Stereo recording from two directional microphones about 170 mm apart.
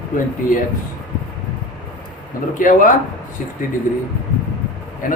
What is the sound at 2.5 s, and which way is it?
Speech, 50° left (ahead or behind).